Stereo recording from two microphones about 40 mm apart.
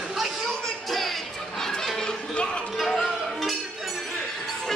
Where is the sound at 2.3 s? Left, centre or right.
Left.